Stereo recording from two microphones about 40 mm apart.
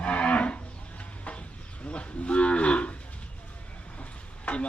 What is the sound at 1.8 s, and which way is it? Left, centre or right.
Livestock, left.